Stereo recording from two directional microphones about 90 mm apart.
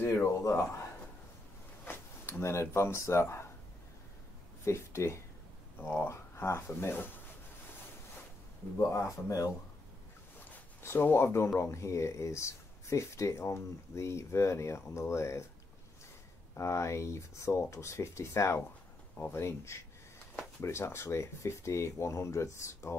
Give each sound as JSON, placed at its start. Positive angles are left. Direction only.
{"t": 0.0, "sound": "speech", "side_deg": 30}
{"t": 1.9, "sound": "speech", "side_deg": 25}
{"t": 4.6, "sound": "speech", "side_deg": 30}
{"t": 8.7, "sound": "speech", "side_deg": 30}
{"t": 10.8, "sound": "speech", "side_deg": 25}
{"t": 16.5, "sound": "speech", "side_deg": 30}